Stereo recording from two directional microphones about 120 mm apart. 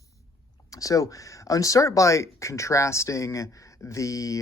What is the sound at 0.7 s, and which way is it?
Speech, 30° left (ahead or behind).